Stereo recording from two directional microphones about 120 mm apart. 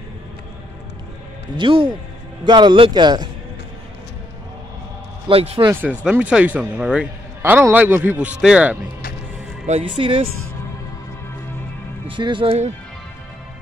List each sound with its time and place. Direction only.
1.6 s a man's voice: 45° right (ahead or behind)
5.3 s speech: 55° right (ahead or behind)
5.7 s a man's voice: 15° right (ahead or behind)
9.8 s speech: 45° right (ahead or behind)
12.1 s speech: 40° right (ahead or behind)
12.4 s speech: 70° right (ahead or behind)